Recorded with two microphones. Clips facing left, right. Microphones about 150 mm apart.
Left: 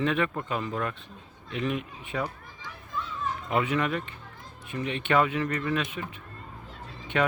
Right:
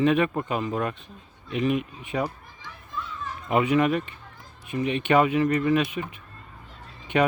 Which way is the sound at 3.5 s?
15° right (ahead or behind).